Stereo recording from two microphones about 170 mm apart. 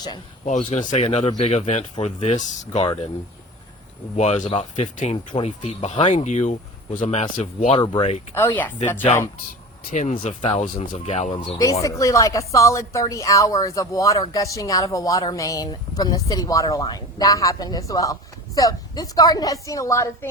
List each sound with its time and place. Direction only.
0.4 s speech: 45° left (ahead or behind)
4.2 s speech: 40° left (ahead or behind)
11.3 s a woman's voice: 30° left (ahead or behind)
11.6 s a woman's voice: 20° left (ahead or behind)